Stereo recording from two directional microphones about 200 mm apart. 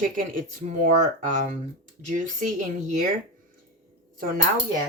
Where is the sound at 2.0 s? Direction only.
40° right (ahead or behind).